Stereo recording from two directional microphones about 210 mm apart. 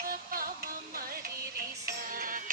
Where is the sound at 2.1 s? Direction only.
40° right (ahead or behind).